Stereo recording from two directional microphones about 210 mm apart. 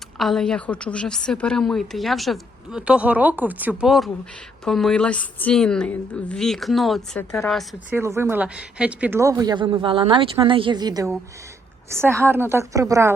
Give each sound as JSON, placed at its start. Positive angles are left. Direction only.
{"t": 0.2, "sound": "a woman's voice", "side_deg": 0}
{"t": 7.9, "sound": "speech", "side_deg": -10}